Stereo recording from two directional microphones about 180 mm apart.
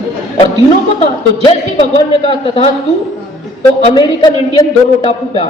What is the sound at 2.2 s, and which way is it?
Speech, 30° left (ahead or behind).